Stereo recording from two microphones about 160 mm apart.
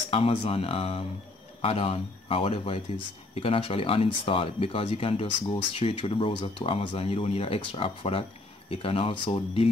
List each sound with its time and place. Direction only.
0.1 s speech: 35° left (ahead or behind)